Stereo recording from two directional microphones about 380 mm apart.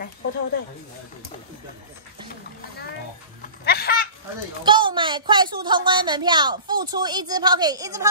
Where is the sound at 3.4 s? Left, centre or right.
Left.